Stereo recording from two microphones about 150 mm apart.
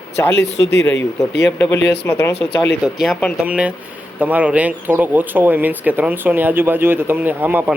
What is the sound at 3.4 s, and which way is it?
Speech, 10° right (ahead or behind).